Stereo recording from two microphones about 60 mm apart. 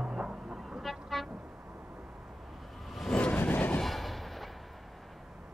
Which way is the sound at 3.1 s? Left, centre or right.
Left.